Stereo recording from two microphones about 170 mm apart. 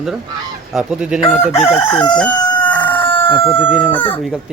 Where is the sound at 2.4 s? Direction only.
25° left (ahead or behind).